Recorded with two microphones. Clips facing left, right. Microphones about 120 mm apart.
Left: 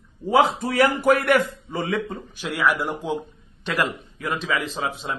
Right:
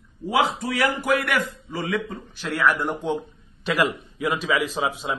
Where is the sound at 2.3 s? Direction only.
15° left (ahead or behind).